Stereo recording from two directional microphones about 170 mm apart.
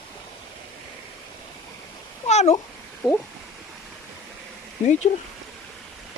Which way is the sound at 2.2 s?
40° left (ahead or behind).